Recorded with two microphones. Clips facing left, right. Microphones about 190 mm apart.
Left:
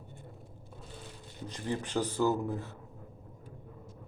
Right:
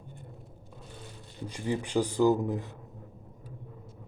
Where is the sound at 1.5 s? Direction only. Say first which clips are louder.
Right 3 dB; 10° right (ahead or behind).